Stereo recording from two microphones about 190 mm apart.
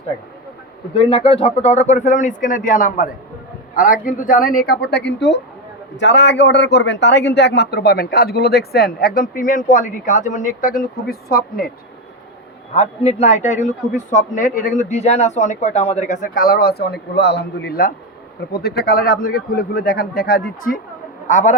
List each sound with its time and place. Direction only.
0.9 s a man's voice: 30° left (ahead or behind); by 11.6 s 50° left (ahead or behind)
12.7 s a man's voice: 30° left (ahead or behind)